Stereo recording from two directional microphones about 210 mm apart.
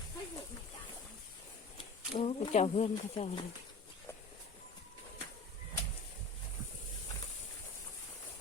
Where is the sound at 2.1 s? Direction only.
30° left (ahead or behind).